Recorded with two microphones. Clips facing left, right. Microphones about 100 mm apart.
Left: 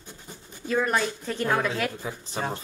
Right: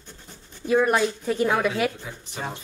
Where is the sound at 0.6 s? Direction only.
10° right (ahead or behind).